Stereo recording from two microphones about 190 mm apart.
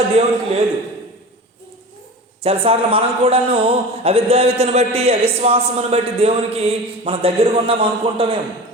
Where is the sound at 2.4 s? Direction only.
30° right (ahead or behind).